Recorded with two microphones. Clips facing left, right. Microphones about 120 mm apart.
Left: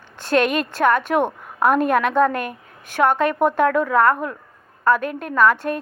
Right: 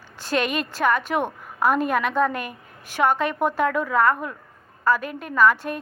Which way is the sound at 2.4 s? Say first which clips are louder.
Left 5 dB; 50° left (ahead or behind).